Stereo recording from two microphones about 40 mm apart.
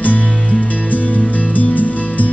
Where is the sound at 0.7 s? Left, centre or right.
Left.